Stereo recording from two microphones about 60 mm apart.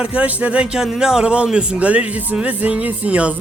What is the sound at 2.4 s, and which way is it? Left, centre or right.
Music, right.